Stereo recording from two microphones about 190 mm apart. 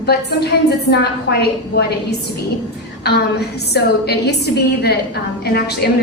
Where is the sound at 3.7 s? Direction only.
60° left (ahead or behind).